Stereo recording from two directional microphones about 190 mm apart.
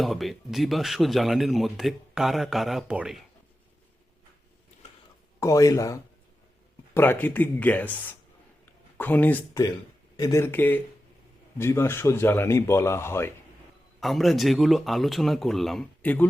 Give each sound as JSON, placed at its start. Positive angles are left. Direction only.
{"t": 0.0, "sound": "speech", "side_deg": 0}
{"t": 5.4, "sound": "speech", "side_deg": 15}
{"t": 8.6, "sound": "a sound", "side_deg": 10}
{"t": 10.2, "sound": "speech", "side_deg": 15}
{"t": 14.0, "sound": "speech", "side_deg": 0}